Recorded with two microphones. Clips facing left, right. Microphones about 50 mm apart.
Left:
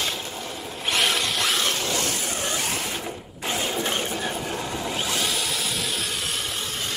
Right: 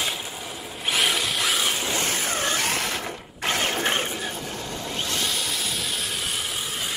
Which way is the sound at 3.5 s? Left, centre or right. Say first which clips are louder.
Right 2 dB; right.